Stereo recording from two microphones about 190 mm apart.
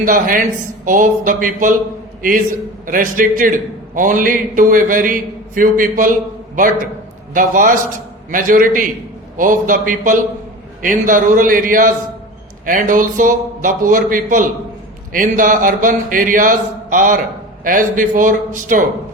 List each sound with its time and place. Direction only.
0.0 s a man's voice: 45° right (ahead or behind)
2.8 s a man's voice: 45° right (ahead or behind)
7.3 s a man's voice: 45° right (ahead or behind)